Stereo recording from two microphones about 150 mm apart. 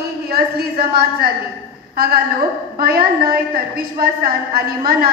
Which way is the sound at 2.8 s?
85° right.